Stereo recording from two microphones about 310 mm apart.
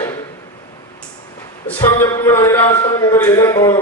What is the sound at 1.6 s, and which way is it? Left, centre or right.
A man's voice, centre.